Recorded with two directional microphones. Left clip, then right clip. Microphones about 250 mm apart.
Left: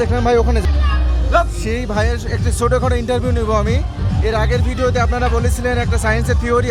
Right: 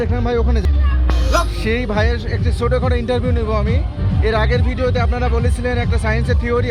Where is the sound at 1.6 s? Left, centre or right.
Centre.